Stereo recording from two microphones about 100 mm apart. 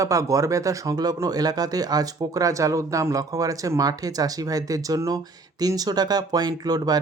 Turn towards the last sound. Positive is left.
turn(degrees=-40)  # may be behind; listen again after turning